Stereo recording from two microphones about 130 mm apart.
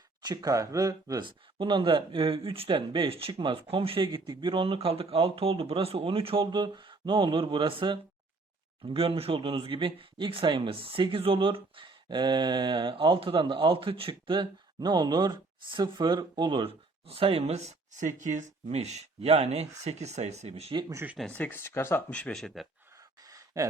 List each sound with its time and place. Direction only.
0.2 s speech: 30° right (ahead or behind)
1.2 s speech: 40° right (ahead or behind)
20.9 s speech: 15° right (ahead or behind)
21.2 s speech: 10° left (ahead or behind)
23.2 s gasp: 25° right (ahead or behind)